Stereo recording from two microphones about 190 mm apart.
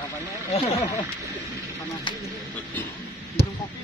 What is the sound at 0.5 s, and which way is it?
Speech, 35° left (ahead or behind).